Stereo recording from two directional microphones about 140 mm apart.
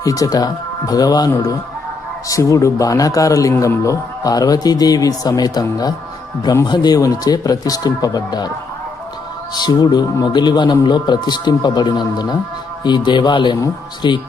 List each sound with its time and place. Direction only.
0.0 s a man's voice: 25° left (ahead or behind)
9.6 s speech: 30° left (ahead or behind)